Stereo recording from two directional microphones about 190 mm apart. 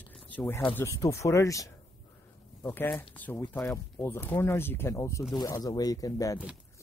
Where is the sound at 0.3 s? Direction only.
10° left (ahead or behind).